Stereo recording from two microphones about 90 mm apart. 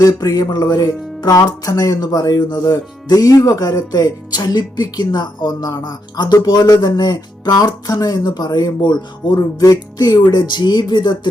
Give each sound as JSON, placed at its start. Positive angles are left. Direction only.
{"t": 0.0, "sound": "music", "side_deg": 45}